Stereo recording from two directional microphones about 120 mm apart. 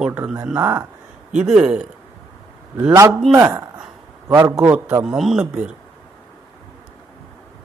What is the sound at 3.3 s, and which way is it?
A man's voice, 25° right (ahead or behind).